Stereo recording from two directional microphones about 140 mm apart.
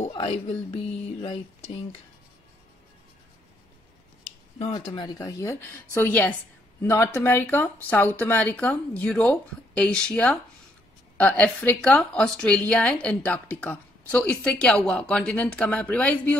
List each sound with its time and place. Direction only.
0.0 s music: 45° left (ahead or behind)
1.0 s a sound: 40° left (ahead or behind)
4.7 s speech: 35° left (ahead or behind)
5.9 s a woman's voice: 10° left (ahead or behind)